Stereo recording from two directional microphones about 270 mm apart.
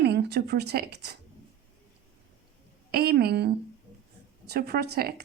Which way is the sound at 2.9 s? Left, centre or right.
Right.